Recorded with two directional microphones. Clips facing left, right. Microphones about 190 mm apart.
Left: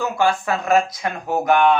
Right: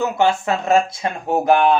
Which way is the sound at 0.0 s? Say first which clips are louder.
Right 2 dB; 20° right (ahead or behind).